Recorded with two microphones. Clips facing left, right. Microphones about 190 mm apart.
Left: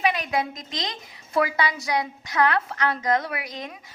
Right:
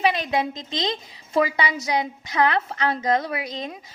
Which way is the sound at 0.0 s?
30° right (ahead or behind).